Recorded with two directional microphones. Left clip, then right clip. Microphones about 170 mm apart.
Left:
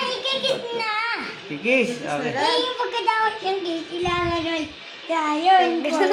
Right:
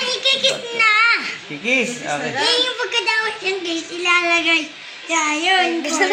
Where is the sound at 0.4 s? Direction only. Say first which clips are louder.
Right 7 dB; 30° left (ahead or behind).